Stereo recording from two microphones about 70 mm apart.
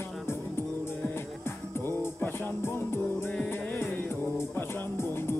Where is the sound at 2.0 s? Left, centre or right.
Left.